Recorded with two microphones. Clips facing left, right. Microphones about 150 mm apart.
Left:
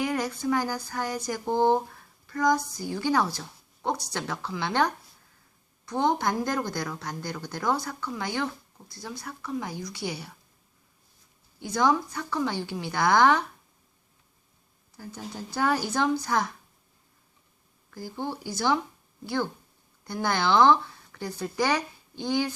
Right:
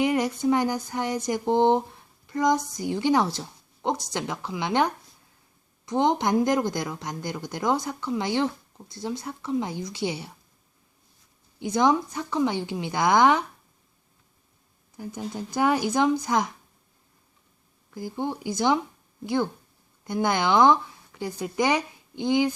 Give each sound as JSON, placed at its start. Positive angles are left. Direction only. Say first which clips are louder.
{"t": 0.0, "sound": "speech", "louder": "right 5 dB", "side_deg": -20}
{"t": 11.6, "sound": "speech", "louder": "right 3 dB", "side_deg": -20}
{"t": 14.9, "sound": "speech", "louder": "right 5 dB", "side_deg": -20}
{"t": 17.9, "sound": "speech", "louder": "right 4 dB", "side_deg": -20}